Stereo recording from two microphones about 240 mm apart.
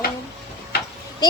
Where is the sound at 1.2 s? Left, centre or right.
Centre.